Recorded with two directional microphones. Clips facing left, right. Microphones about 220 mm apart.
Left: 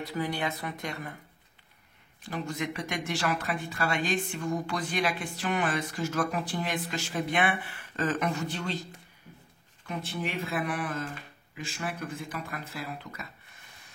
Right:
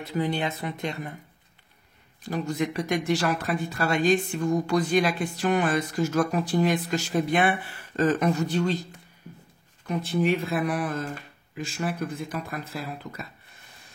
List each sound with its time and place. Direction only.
0.0 s speech: 25° right (ahead or behind)
2.2 s speech: 35° right (ahead or behind)
9.8 s speech: 40° right (ahead or behind)